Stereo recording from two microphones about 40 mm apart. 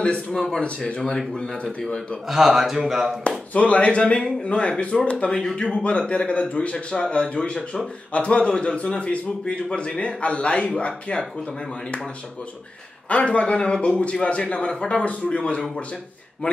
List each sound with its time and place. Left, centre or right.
0.3 s a man's voice: centre
0.7 s a man's voice: left
2.2 s speech: centre
3.3 s a man's voice: left
13.1 s a man's voice: left
15.0 s speech: left